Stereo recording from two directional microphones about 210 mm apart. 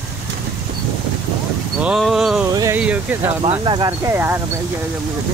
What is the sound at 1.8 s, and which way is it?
Speech, centre (ahead or behind).